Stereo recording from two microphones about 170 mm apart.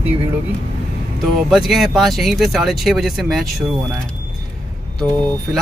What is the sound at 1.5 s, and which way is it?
Speech, centre (ahead or behind).